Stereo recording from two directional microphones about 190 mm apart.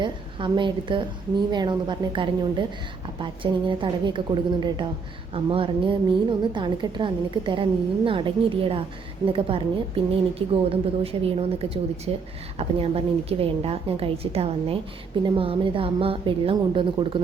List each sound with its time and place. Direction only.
0.0 s a woman's voice: 25° right (ahead or behind)
5.3 s a woman's voice: 30° right (ahead or behind)